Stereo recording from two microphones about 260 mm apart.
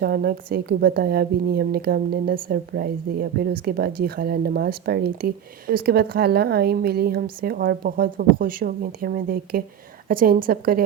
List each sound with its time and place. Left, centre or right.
0.0 s a woman's voice: right